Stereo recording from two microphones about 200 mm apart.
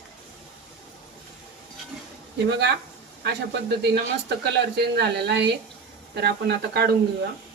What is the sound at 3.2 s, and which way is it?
Speech, 60° right (ahead or behind).